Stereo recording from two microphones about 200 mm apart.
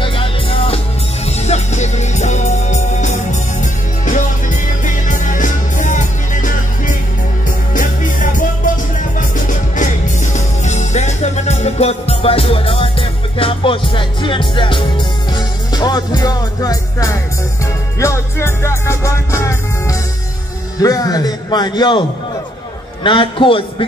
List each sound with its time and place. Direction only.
0.0 s music: 25° left (ahead or behind)
20.8 s a sound: 20° left (ahead or behind)
23.0 s a man's voice: 25° left (ahead or behind)